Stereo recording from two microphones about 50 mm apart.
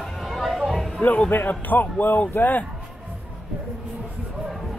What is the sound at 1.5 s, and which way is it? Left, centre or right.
A man's voice, left.